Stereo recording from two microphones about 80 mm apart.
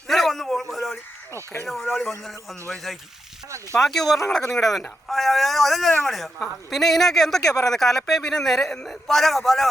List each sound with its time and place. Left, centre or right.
0.1 s a sound: centre
1.6 s speech: centre
7.4 s speech: left
7.7 s speech: centre